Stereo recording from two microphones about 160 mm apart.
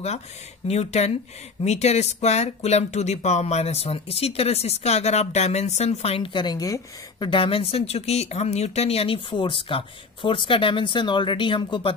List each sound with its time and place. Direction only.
0.7 s speech: 40° left (ahead or behind)